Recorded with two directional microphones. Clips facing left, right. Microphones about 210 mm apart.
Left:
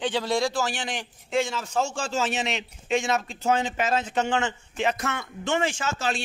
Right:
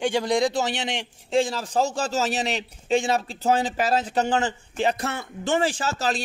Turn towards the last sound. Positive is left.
turn(degrees=-40)  # may be behind; listen again after turning